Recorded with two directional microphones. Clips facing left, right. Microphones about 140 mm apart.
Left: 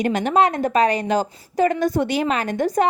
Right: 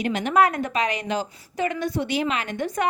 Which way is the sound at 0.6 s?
35° left (ahead or behind).